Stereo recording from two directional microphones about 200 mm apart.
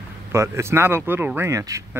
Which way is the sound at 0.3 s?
15° right (ahead or behind).